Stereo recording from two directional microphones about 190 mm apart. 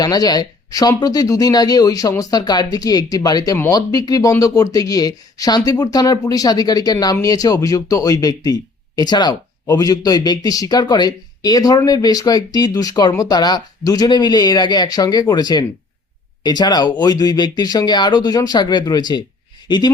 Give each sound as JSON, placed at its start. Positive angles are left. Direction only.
{"t": 0.0, "sound": "speech", "side_deg": 20}